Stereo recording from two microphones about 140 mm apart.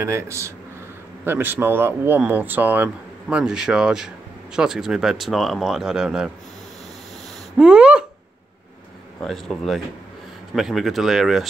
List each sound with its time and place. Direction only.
0.0 s a man's voice: 20° right (ahead or behind); by 6.3 s 5° right (ahead or behind)
7.5 s a sound: 5° right (ahead or behind)
9.2 s speech: centre (ahead or behind)